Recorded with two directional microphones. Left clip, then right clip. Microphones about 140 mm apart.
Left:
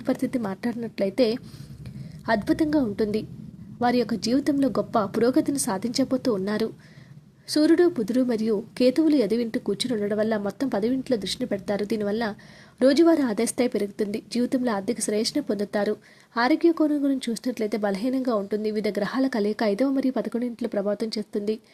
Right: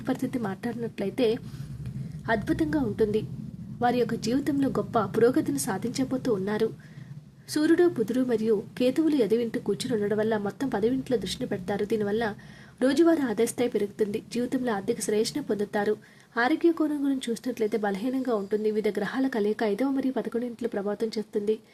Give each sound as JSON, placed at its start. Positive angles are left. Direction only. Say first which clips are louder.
{"t": 0.0, "sound": "a woman's voice", "louder": "left 4 dB", "side_deg": 25}